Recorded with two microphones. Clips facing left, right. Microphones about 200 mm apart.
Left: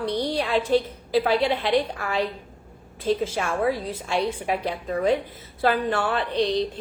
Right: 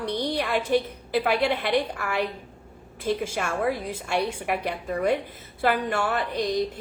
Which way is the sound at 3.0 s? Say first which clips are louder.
Left 3 dB; 10° right (ahead or behind).